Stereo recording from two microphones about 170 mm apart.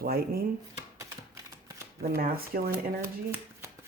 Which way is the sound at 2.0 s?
60° right (ahead or behind).